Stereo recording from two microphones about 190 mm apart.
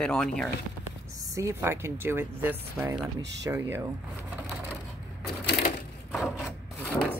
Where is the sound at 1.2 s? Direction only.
15° right (ahead or behind).